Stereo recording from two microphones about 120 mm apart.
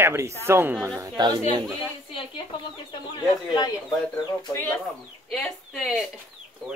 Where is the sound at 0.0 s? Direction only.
20° right (ahead or behind).